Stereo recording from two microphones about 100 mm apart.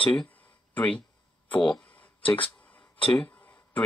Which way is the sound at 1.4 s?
50° left (ahead or behind).